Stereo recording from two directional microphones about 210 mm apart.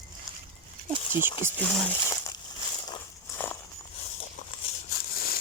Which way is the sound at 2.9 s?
10° left (ahead or behind).